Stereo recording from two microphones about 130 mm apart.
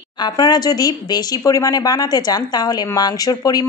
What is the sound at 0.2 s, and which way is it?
Speech, 35° left (ahead or behind).